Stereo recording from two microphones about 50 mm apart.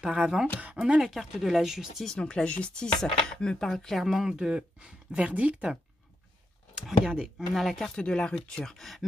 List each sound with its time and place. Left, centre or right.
0.0 s speech: centre
2.1 s speech: centre
4.0 s speech: centre; by 5.6 s right
6.7 s speech: centre
7.9 s speech: centre